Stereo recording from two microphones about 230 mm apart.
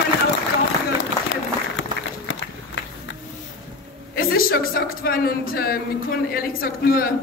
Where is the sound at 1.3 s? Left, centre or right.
Left.